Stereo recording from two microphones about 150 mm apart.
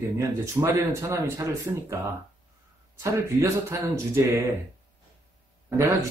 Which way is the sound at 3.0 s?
20° right (ahead or behind).